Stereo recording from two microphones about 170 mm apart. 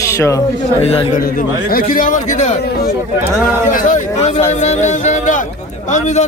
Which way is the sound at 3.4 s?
50° left (ahead or behind).